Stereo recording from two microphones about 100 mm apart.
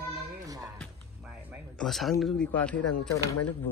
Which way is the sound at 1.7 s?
Centre (ahead or behind).